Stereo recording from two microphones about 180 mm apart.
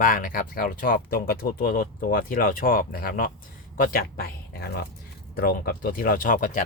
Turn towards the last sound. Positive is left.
turn(degrees=45)  # may be behind; listen again after turning